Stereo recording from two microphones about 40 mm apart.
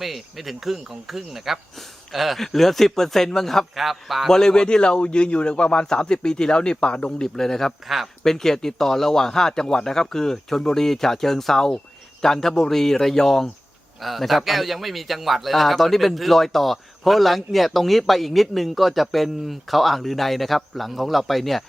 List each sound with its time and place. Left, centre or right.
0.0 s a man's voice: centre
3.8 s a man's voice: centre
4.3 s a man's voice: centre
7.2 s speech: centre
7.9 s a man's voice: centre
8.2 s speech: centre
14.0 s a man's voice: centre